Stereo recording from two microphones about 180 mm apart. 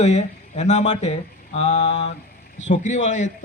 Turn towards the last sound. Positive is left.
turn(degrees=40)  # may be behind; listen again after turning